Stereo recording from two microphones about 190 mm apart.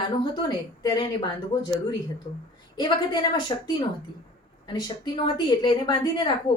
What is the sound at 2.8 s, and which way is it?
Speech, 25° left (ahead or behind).